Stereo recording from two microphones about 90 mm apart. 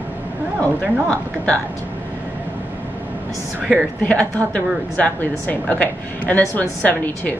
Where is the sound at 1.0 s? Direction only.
15° left (ahead or behind).